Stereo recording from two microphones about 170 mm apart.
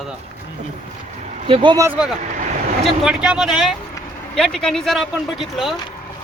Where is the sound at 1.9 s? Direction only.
5° right (ahead or behind).